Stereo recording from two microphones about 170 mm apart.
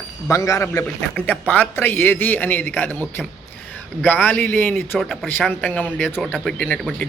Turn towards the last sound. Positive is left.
turn(degrees=5)  # may be behind; listen again after turning